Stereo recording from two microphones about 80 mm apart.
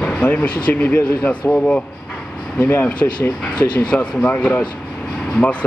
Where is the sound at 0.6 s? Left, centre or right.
Left.